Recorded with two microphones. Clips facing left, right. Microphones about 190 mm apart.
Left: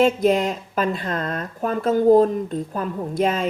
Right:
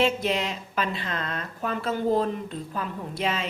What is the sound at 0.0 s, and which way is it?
Speech, 45° left (ahead or behind).